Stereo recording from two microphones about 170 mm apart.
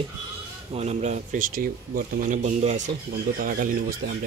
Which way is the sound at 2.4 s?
45° right (ahead or behind).